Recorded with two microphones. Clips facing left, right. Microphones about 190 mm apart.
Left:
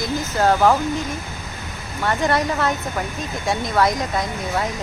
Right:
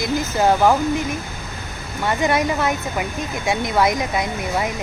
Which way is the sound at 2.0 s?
15° right (ahead or behind).